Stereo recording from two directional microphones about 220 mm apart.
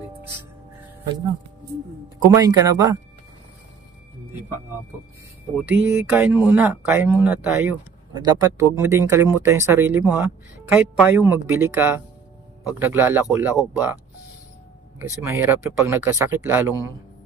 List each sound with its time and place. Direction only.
2.2 s speech: 15° right (ahead or behind)
5.7 s speech: 5° right (ahead or behind)
15.0 s speech: 15° right (ahead or behind)